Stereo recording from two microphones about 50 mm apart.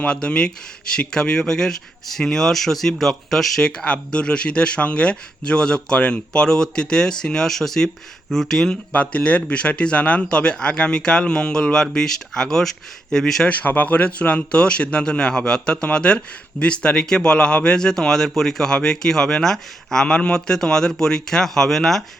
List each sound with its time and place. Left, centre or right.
0.0 s speech: left
3.6 s speech: centre
6.3 s speech: centre
8.9 s speech: left; by 13.5 s centre
13.5 s speech: left; by 20.1 s centre
20.1 s speech: left
20.5 s speech: centre